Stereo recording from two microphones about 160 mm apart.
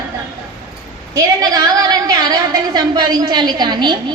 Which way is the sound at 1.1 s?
20° right (ahead or behind).